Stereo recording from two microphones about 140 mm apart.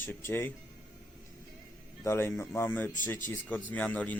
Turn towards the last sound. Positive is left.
turn(degrees=10)  # may be behind; listen again after turning